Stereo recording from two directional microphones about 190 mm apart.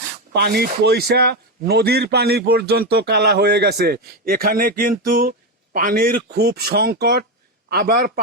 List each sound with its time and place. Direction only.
0.3 s speech: 55° right (ahead or behind)